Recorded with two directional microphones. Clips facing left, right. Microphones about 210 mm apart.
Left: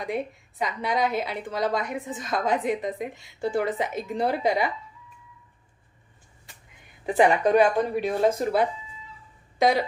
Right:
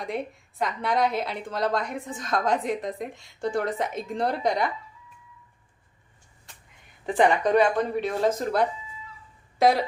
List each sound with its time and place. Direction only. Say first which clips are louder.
0.0 s a woman's voice: left 2 dB; centre (ahead or behind)
7.0 s speech: left 1 dB; 5° left (ahead or behind)
9.6 s speech: right 1 dB; centre (ahead or behind)